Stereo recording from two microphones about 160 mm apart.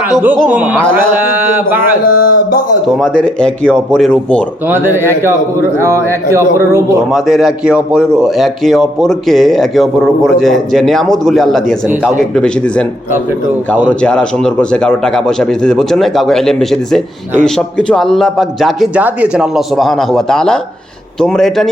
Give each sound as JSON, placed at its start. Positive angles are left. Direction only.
{"t": 0.0, "sound": "speech", "side_deg": -10}
{"t": 1.6, "sound": "a man's voice", "side_deg": 65}
{"t": 2.8, "sound": "a man's voice", "side_deg": 0}
{"t": 4.7, "sound": "speech", "side_deg": -15}
{"t": 7.1, "sound": "a man's voice", "side_deg": -5}
{"t": 14.0, "sound": "a man's voice", "side_deg": 5}